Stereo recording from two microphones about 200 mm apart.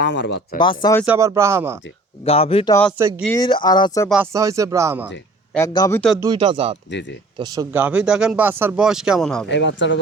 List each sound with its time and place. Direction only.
0.0 s speech: 60° left (ahead or behind)
0.6 s speech: 25° left (ahead or behind)
1.0 s speech: 10° right (ahead or behind)
2.2 s speech: 30° left (ahead or behind)
4.1 s speech: 10° right (ahead or behind)
5.5 s a man's voice: 20° left (ahead or behind)
6.1 s speech: 20° right (ahead or behind); by 9.5 s centre (ahead or behind)
9.5 s speech: 60° left (ahead or behind)